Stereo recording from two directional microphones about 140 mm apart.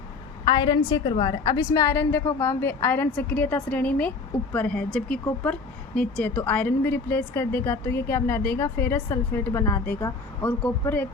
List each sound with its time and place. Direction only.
0.4 s a woman's voice: 30° left (ahead or behind); by 11.0 s 15° left (ahead or behind)